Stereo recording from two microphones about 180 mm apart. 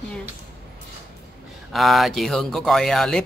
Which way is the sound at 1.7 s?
Centre (ahead or behind).